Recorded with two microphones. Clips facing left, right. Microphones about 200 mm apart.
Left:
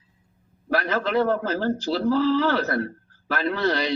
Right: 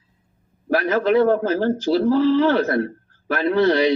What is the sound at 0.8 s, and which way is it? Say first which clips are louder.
A man's voice: right 6 dB; 15° right (ahead or behind).